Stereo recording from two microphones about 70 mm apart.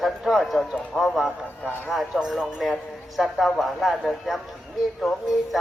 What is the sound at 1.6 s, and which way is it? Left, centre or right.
Speech, left.